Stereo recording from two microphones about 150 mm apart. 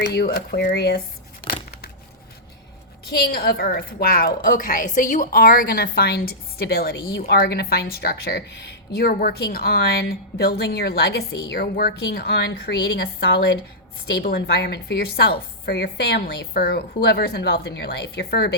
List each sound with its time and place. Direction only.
0.2 s a woman's voice: 90° left
3.1 s a woman's voice: 90° left
4.4 s a woman's voice: 60° left (ahead or behind); by 18.5 s 90° left